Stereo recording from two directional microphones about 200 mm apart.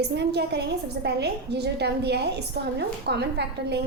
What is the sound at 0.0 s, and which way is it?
A woman's voice, 55° right (ahead or behind).